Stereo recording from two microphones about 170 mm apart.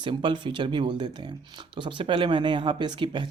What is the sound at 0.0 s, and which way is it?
Speech, 30° right (ahead or behind).